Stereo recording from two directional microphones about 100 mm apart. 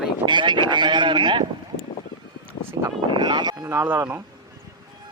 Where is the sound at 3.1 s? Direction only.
50° right (ahead or behind).